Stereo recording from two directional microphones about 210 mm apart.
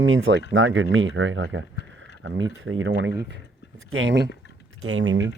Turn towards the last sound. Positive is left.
turn(degrees=-70)  # may be behind; listen again after turning